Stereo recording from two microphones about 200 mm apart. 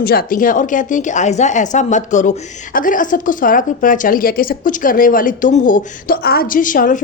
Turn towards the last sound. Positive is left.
turn(degrees=40)  # may be behind; listen again after turning